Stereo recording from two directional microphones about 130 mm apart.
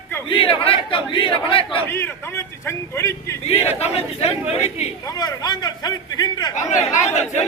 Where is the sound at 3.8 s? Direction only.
50° left (ahead or behind).